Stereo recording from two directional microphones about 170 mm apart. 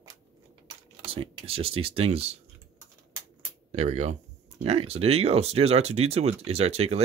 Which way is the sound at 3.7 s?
40° right (ahead or behind).